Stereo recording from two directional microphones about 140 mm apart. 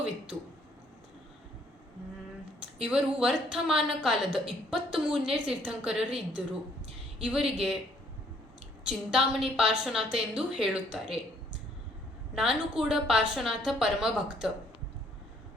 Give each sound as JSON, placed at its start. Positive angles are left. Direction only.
{"t": 2.7, "sound": "a woman's voice", "side_deg": -5}
{"t": 8.9, "sound": "a woman's voice", "side_deg": -5}
{"t": 12.3, "sound": "a woman's voice", "side_deg": -5}